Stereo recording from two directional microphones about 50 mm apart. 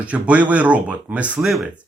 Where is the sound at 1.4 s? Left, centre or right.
Centre.